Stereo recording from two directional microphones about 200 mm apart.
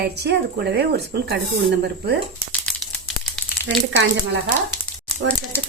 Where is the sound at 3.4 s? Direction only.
Centre (ahead or behind).